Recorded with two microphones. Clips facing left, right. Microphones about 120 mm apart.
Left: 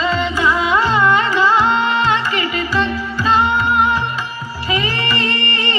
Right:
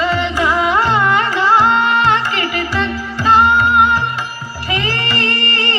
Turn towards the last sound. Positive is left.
turn(degrees=-65)  # may be behind; listen again after turning